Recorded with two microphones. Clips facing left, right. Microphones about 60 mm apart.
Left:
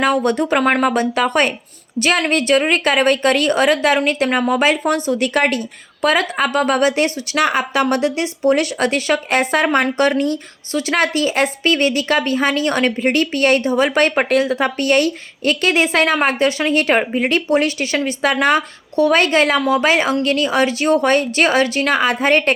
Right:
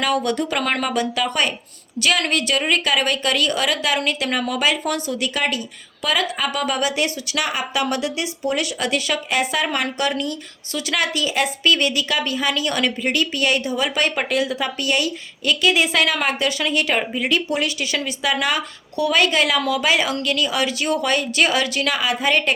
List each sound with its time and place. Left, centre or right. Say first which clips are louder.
0.0 s speech: left 5 dB; left